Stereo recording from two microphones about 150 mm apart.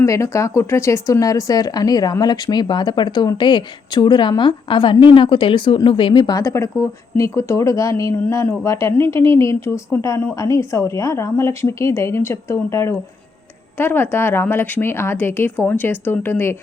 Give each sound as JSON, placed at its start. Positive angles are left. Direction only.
{"t": 0.0, "sound": "speech", "side_deg": 20}